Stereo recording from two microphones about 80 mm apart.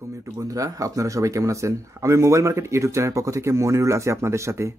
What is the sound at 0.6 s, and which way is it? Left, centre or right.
Speech, right.